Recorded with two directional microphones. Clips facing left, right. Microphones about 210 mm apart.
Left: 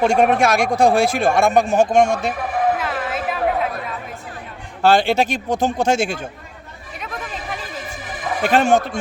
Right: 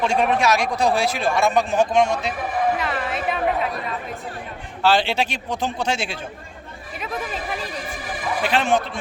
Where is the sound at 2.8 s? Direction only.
Centre (ahead or behind).